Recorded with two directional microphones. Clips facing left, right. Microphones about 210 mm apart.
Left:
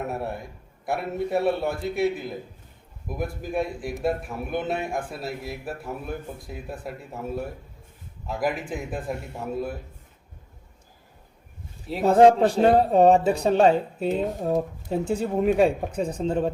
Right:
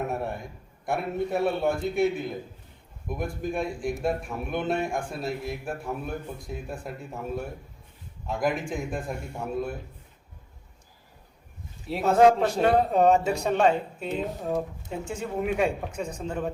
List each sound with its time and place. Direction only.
0.9 s a man's voice: centre (ahead or behind)
12.0 s speech: 35° left (ahead or behind)